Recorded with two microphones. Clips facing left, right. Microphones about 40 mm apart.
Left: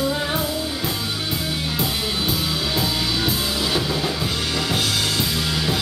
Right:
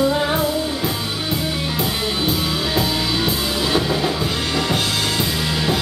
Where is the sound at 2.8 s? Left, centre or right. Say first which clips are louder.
Right 3 dB; centre.